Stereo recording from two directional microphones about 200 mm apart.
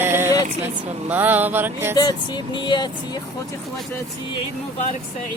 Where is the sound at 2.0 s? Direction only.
20° left (ahead or behind).